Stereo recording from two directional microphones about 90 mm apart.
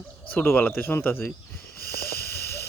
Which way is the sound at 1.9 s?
25° left (ahead or behind).